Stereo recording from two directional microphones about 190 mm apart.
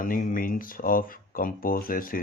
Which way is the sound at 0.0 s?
45° left (ahead or behind).